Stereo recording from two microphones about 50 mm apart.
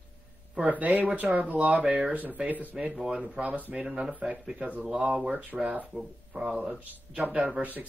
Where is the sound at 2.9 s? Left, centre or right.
Centre.